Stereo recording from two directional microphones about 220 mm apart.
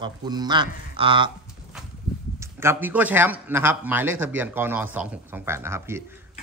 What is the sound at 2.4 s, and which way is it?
A man's voice, 10° right (ahead or behind).